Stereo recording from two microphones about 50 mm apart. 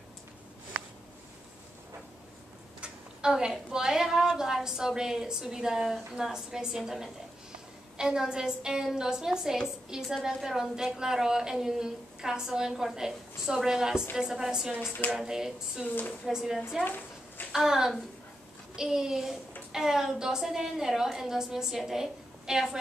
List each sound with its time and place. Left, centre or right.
2.8 s a woman's voice: centre
16.8 s a sound: left
17.5 s a woman's voice: centre